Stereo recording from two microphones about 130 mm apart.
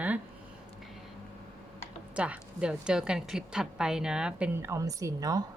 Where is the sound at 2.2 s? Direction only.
10° right (ahead or behind).